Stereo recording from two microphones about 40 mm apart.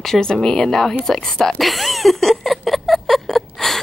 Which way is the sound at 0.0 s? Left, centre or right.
Centre.